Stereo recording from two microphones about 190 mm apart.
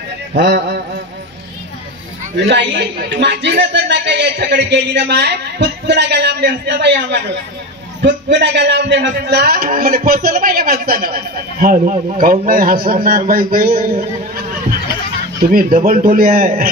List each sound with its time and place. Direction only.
0.3 s music: 60° right (ahead or behind)
2.3 s a man's voice: 65° right (ahead or behind); by 14.0 s 50° right (ahead or behind)
15.4 s a man's voice: 50° right (ahead or behind)